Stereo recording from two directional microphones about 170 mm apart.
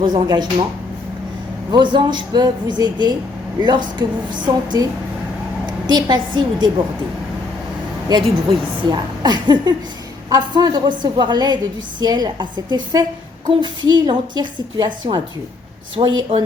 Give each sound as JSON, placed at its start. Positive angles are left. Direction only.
{"t": 0.0, "sound": "a woman's voice", "side_deg": -25}
{"t": 1.7, "sound": "a woman's voice", "side_deg": -25}
{"t": 8.4, "sound": "a woman's voice", "side_deg": -25}